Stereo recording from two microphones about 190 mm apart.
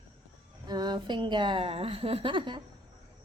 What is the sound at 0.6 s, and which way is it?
A woman's voice, 20° right (ahead or behind).